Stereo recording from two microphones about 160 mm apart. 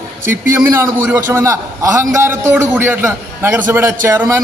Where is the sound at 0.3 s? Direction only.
15° right (ahead or behind).